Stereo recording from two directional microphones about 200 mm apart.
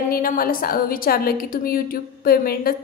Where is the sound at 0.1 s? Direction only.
45° left (ahead or behind).